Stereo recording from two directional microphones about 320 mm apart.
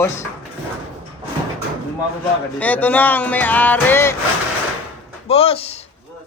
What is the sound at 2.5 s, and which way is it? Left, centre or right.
Speech, centre.